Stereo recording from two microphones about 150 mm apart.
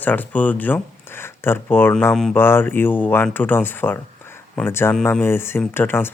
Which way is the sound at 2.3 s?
15° left (ahead or behind).